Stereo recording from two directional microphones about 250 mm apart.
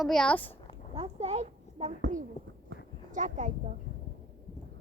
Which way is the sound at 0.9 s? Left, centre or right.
Right.